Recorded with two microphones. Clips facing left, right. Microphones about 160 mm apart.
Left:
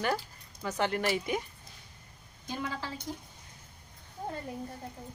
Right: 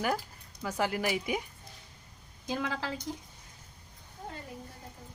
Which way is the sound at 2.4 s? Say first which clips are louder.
Right 3 dB; 90° right.